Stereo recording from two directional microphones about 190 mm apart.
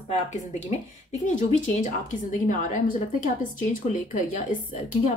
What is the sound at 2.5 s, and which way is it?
A woman's voice, 45° left (ahead or behind).